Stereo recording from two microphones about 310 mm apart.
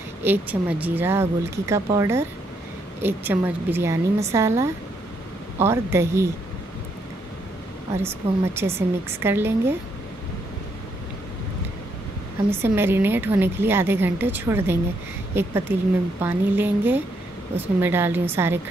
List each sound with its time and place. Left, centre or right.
0.2 s a woman's voice: centre
8.2 s speech: centre
8.5 s a woman's voice: centre
12.4 s a woman's voice: centre